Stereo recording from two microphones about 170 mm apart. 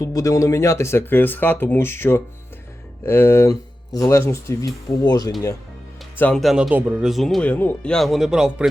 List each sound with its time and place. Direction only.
0.0 s speech: 20° left (ahead or behind)
6.1 s speech: 5° left (ahead or behind)